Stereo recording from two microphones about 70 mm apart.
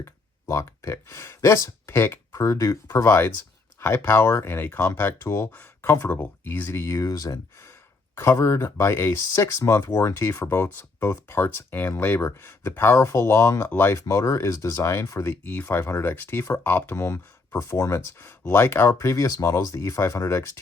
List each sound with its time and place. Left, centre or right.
0.0 s speech: left
2.9 s speech: left
5.8 s speech: left
6.7 s speech: left
7.6 s speech: left
13.7 s speech: left
13.9 s speech: left
15.2 s speech: left
17.7 s speech: left
18.2 s speech: left
18.9 s speech: left